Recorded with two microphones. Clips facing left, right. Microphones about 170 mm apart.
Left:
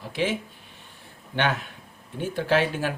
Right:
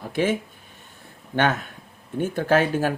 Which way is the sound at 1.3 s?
45° right (ahead or behind).